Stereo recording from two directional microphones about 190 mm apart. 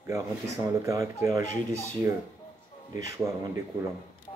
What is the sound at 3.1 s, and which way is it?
Speech, 15° right (ahead or behind).